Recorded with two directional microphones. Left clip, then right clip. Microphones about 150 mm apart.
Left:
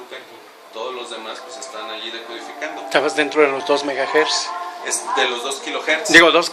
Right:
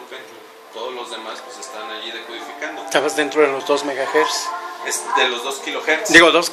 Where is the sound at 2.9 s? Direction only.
5° left (ahead or behind).